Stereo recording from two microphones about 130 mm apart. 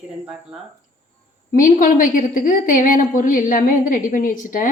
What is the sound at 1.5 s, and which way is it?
A woman's voice, 90° left.